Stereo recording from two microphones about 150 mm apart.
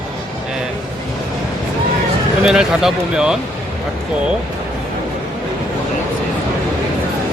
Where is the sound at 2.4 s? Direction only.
5° right (ahead or behind).